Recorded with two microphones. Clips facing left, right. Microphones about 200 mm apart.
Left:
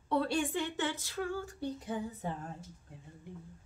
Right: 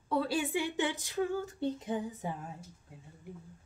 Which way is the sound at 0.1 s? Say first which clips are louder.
Even; 5° right (ahead or behind).